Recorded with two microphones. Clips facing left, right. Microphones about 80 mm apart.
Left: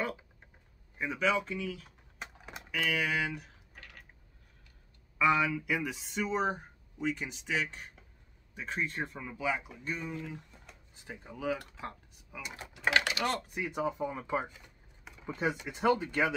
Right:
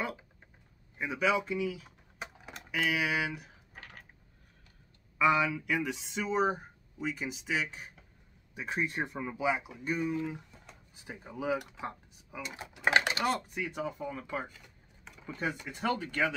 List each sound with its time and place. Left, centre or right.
0.9 s typing: centre
2.7 s speech: centre
3.7 s a sound: right
5.2 s speech: centre
13.7 s speech: centre